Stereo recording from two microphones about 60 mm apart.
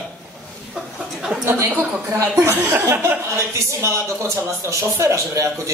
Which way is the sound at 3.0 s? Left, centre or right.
Right.